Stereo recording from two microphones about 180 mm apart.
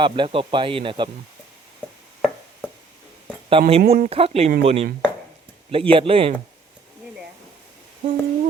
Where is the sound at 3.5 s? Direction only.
30° right (ahead or behind).